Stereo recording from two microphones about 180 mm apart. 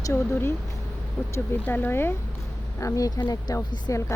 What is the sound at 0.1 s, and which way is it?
Speech, 15° left (ahead or behind).